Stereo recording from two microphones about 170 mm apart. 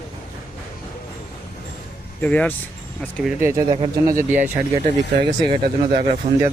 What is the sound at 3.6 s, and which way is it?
Speech, 35° right (ahead or behind).